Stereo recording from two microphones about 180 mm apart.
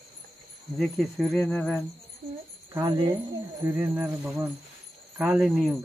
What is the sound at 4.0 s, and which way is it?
Speech, 10° right (ahead or behind).